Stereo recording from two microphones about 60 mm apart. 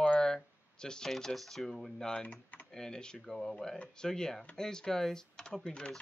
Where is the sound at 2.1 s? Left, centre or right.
Centre.